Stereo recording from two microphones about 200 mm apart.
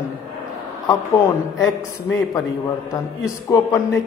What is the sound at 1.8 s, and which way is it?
A man's voice, 10° left (ahead or behind).